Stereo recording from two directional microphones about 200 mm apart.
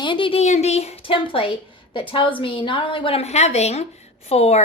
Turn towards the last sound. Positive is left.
turn(degrees=30)  # may be behind; listen again after turning